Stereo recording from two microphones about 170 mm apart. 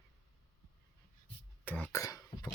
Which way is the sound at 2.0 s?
20° left (ahead or behind).